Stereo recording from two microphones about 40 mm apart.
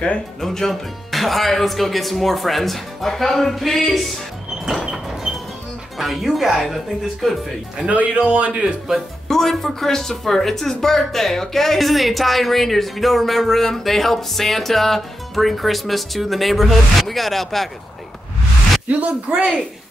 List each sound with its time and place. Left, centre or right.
0.4 s speech: centre
4.9 s a sound: centre
5.9 s speech: centre
7.8 s speech: right
9.3 s speech: centre
18.9 s speech: right